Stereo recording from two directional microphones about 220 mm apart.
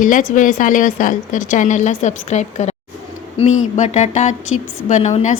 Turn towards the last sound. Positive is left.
turn(degrees=30)  # may be behind; listen again after turning